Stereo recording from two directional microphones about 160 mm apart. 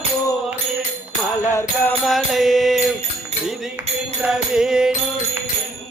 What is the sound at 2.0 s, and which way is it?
Music, centre (ahead or behind).